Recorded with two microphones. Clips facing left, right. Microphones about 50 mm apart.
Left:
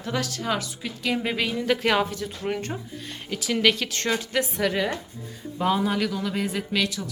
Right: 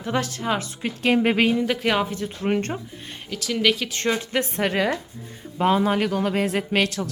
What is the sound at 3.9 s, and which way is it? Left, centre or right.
Speech, centre.